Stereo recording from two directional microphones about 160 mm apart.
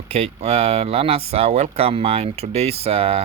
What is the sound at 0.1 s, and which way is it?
Speech, 45° right (ahead or behind).